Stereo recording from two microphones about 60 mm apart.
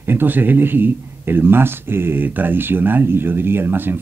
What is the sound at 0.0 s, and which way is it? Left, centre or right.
Speech, right.